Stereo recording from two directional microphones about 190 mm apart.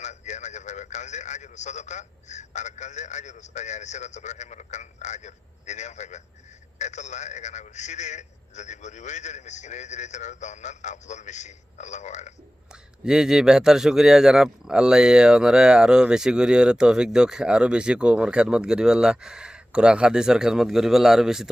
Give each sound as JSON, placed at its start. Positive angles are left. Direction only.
{"t": 0.0, "sound": "a man's voice", "side_deg": 40}
{"t": 13.1, "sound": "a man's voice", "side_deg": -5}